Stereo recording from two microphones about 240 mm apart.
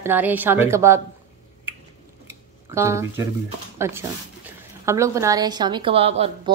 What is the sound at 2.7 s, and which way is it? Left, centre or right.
A woman's voice, centre.